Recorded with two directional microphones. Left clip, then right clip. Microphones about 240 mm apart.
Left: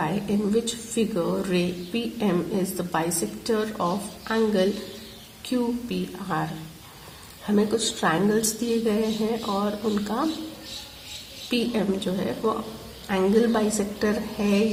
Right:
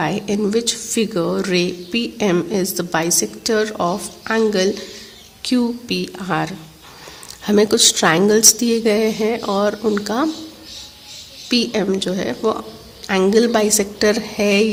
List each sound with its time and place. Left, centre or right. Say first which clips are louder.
0.0 s a woman's voice: right 7 dB; right
11.4 s a woman's voice: right 7 dB; right